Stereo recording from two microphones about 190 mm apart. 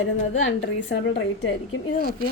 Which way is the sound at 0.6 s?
70° left (ahead or behind).